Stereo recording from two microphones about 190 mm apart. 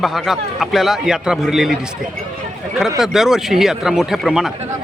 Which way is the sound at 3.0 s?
Centre (ahead or behind).